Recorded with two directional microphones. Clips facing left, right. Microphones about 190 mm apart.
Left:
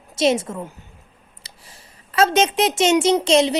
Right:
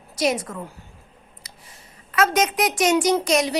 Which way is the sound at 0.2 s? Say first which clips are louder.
Left 4 dB; 25° left (ahead or behind).